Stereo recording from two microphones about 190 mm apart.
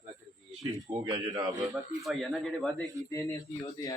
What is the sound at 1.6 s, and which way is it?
Speech, centre (ahead or behind).